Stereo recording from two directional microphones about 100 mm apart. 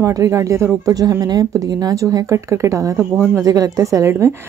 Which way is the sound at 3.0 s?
5° left (ahead or behind).